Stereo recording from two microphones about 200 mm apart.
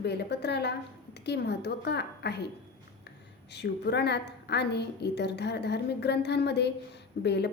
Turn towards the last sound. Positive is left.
turn(degrees=55)  # may be behind; listen again after turning